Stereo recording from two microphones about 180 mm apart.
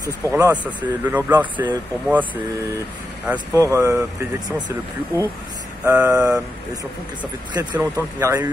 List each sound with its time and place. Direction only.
0.0 s speech: 15° right (ahead or behind)
1.0 s speech: 10° right (ahead or behind)
3.3 s speech: 15° right (ahead or behind)